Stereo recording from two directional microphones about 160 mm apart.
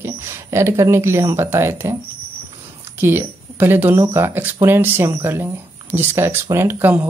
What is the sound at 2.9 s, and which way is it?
Speech, 15° right (ahead or behind).